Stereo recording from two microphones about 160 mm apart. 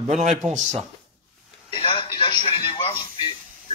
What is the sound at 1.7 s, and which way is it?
Telephone, 35° left (ahead or behind).